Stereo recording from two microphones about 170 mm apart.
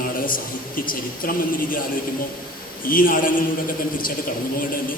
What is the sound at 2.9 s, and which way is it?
Speech, 55° left (ahead or behind).